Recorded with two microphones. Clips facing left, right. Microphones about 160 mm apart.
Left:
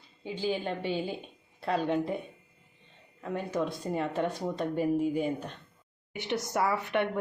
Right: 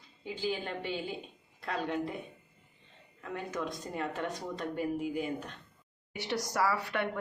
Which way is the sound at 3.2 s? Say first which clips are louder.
Left 5 dB; 30° left (ahead or behind).